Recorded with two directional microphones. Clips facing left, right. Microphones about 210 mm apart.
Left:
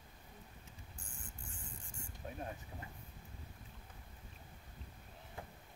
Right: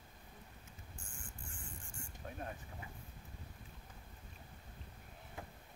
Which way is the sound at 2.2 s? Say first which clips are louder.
Left 2 dB; 20° left (ahead or behind).